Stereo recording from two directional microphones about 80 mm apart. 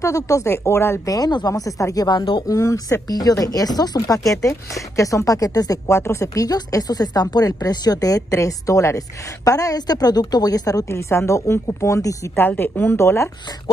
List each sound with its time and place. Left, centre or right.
0.0 s speech: left
1.0 s speech: left
2.0 s speech: left
2.4 s speech: left
4.4 s speech: left
5.9 s speech: left
10.9 s speech: left
12.4 s speech: left
12.9 s speech: left